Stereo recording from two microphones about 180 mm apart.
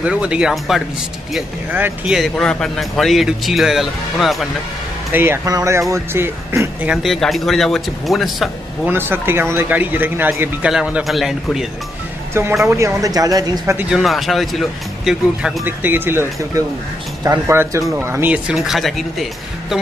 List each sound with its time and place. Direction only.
0.0 s speech: 5° right (ahead or behind)
5.1 s speech: 15° right (ahead or behind)
8.9 s speech: 10° right (ahead or behind)
12.6 s speech: 15° right (ahead or behind)
13.8 s speech: centre (ahead or behind)